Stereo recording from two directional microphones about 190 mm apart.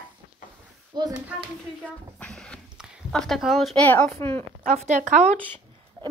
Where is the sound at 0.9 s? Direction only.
25° right (ahead or behind).